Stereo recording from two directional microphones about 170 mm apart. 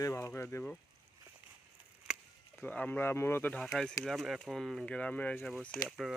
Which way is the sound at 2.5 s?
10° left (ahead or behind).